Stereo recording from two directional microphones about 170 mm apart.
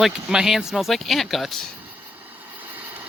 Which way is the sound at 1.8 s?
10° right (ahead or behind).